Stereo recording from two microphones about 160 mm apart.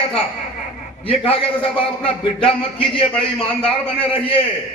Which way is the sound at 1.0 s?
35° left (ahead or behind).